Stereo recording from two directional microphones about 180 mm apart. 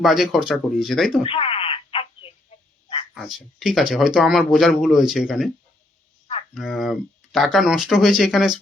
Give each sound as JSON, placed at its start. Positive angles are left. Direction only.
{"t": 0.0, "sound": "speech", "side_deg": 0}
{"t": 1.2, "sound": "a sound", "side_deg": 30}
{"t": 3.2, "sound": "speech", "side_deg": 0}
{"t": 6.5, "sound": "speech", "side_deg": 0}